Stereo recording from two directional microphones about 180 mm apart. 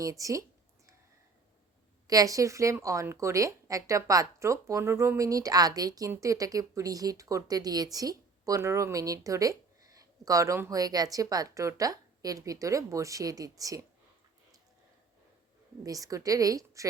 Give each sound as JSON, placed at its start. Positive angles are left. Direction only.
{"t": 0.0, "sound": "a woman's voice", "side_deg": -20}
{"t": 2.0, "sound": "a woman's voice", "side_deg": -20}
{"t": 15.8, "sound": "speech", "side_deg": -20}